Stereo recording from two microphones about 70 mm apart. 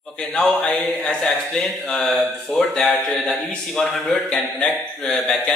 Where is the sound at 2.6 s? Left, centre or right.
Centre.